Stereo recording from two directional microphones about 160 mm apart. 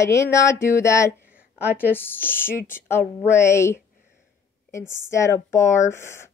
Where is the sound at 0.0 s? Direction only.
20° left (ahead or behind).